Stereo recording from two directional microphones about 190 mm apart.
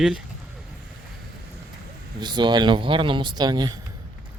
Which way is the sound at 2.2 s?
25° right (ahead or behind).